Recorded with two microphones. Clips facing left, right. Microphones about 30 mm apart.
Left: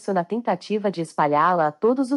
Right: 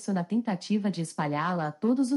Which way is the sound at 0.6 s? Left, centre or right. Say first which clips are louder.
Left 4 dB; left.